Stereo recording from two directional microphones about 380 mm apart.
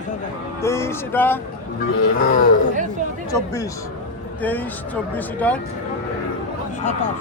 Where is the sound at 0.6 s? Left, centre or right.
Centre.